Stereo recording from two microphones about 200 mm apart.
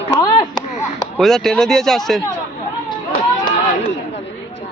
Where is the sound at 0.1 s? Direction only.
20° left (ahead or behind).